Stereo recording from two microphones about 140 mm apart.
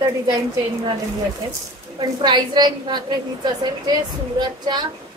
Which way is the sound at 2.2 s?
30° right (ahead or behind).